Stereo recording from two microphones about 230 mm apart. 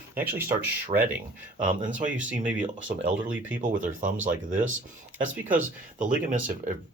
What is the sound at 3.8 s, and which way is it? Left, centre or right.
Speech, right.